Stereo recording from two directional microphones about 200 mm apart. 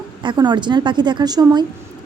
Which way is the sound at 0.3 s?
20° right (ahead or behind).